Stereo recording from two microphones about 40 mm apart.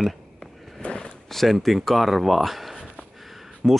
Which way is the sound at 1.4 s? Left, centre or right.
Centre.